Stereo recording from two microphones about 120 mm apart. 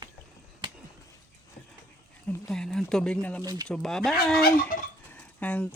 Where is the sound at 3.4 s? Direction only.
35° right (ahead or behind).